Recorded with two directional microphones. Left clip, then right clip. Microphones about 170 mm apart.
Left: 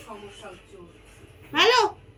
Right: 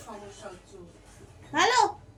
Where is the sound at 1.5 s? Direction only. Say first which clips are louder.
Left 3 dB; 20° right (ahead or behind).